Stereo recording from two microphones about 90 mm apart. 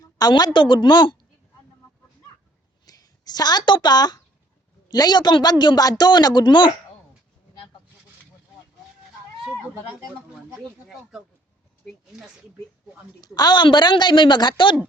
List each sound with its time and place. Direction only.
0.0 s a woman's voice: 50° left (ahead or behind)
0.6 s speech: 65° left (ahead or behind)
2.8 s a woman's voice: 45° left (ahead or behind)
13.2 s speech: 50° left (ahead or behind)